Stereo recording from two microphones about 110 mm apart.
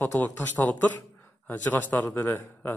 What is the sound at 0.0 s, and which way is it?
Speech, 15° left (ahead or behind).